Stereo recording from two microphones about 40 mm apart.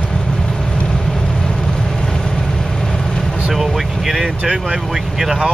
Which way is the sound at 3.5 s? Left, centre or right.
Centre.